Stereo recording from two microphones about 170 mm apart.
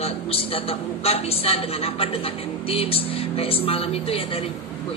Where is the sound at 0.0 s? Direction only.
35° left (ahead or behind).